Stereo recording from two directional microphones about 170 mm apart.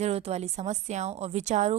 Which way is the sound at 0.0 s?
35° right (ahead or behind).